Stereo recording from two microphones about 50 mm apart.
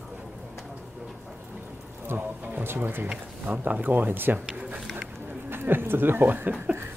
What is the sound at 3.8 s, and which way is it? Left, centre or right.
Speech, right.